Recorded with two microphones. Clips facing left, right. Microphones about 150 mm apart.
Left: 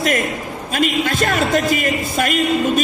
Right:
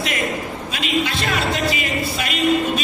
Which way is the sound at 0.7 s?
45° left (ahead or behind).